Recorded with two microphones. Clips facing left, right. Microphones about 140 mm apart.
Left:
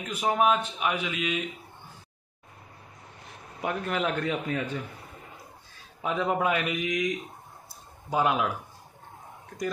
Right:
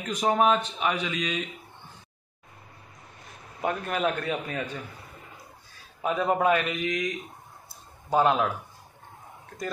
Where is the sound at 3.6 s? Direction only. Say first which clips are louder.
Right 1 dB; 20° right (ahead or behind).